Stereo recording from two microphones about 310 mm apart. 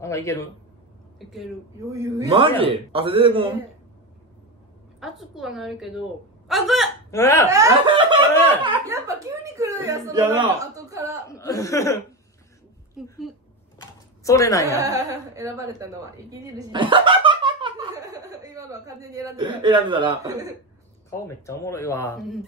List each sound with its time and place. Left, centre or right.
0.0 s a man's voice: centre
1.3 s a woman's voice: centre
2.1 s a man's voice: centre
5.0 s a woman's voice: centre
7.4 s a man's voice: centre
8.3 s speech: centre
8.6 s speech: centre
11.2 s speech: centre
13.0 s a woman's voice: centre
13.7 s a sound: centre
14.7 s a woman's voice: centre
21.1 s speech: centre